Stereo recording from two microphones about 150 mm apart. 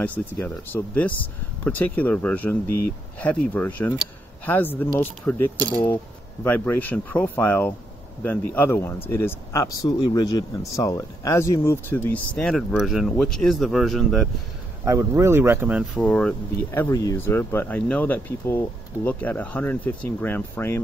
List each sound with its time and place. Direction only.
0.0 s speech: 10° left (ahead or behind)
14.9 s speech: 20° right (ahead or behind)
16.0 s speech: 5° left (ahead or behind)